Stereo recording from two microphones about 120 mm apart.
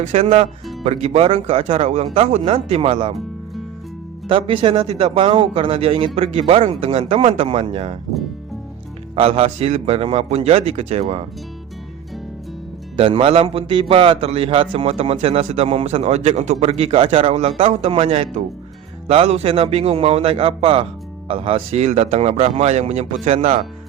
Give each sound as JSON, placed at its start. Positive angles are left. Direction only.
{"t": 0.0, "sound": "a man's voice", "side_deg": -70}
{"t": 4.3, "sound": "speech", "side_deg": -45}
{"t": 9.1, "sound": "a man's voice", "side_deg": -55}
{"t": 13.0, "sound": "a man's voice", "side_deg": -50}